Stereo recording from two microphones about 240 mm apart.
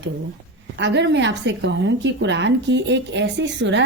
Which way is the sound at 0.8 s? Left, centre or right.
Right.